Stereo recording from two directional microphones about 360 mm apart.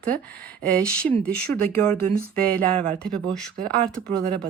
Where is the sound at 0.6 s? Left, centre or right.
Centre.